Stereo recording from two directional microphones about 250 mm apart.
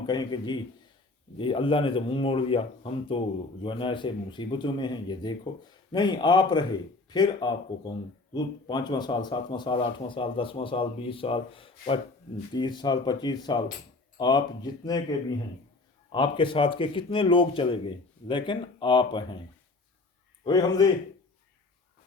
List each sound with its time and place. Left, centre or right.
0.0 s speech: centre
20.4 s speech: centre